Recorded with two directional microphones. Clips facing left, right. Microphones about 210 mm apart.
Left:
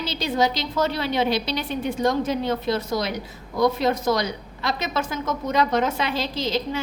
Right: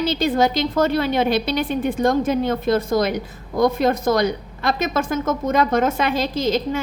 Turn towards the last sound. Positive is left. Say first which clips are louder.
# right 5 dB
turn(degrees=-50)  # may be behind; listen again after turning